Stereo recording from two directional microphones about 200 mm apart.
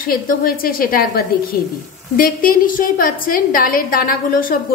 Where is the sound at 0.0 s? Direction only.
45° left (ahead or behind).